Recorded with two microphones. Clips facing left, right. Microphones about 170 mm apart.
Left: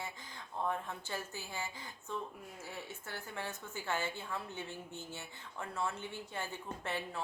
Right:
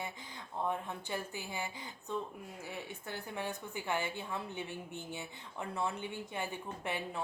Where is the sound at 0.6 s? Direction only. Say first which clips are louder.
Right 1 dB; 15° right (ahead or behind).